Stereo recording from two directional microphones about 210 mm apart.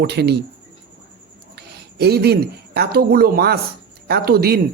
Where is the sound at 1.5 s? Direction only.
50° right (ahead or behind).